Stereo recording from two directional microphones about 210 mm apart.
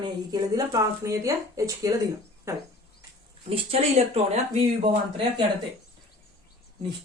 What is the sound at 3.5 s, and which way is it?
Speech, 30° right (ahead or behind).